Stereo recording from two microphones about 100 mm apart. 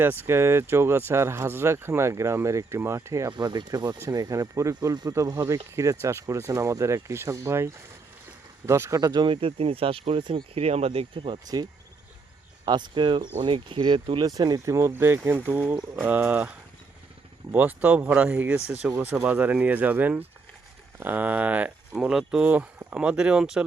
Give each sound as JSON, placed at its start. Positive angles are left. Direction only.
{"t": 0.0, "sound": "speech", "side_deg": -20}
{"t": 3.3, "sound": "speech", "side_deg": -45}
{"t": 9.2, "sound": "speech", "side_deg": -65}
{"t": 12.6, "sound": "speech", "side_deg": -50}